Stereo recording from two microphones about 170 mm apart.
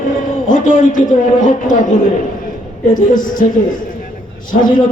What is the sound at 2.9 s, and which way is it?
Speech, 50° left (ahead or behind).